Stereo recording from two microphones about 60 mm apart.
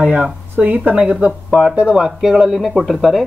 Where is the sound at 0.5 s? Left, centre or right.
Right; by 3.2 s centre.